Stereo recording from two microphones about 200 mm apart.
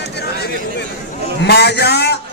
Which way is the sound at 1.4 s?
55° left (ahead or behind).